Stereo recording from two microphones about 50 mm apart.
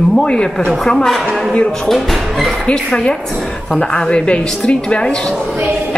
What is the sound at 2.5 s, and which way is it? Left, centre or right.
Music, centre.